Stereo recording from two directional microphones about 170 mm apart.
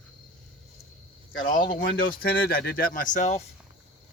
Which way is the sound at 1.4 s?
50° left (ahead or behind).